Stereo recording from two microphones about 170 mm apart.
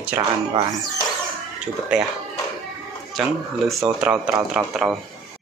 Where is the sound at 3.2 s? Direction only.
Centre (ahead or behind).